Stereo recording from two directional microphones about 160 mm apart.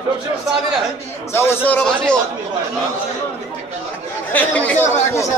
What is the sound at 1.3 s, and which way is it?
Speech, 15° left (ahead or behind).